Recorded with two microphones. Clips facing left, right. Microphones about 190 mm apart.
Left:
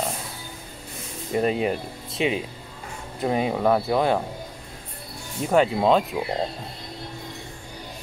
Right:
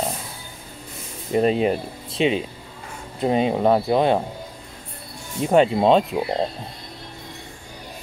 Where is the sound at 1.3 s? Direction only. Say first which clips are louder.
Right 4 dB; 25° right (ahead or behind).